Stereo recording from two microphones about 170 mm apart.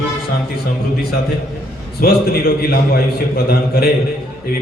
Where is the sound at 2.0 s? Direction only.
65° left (ahead or behind).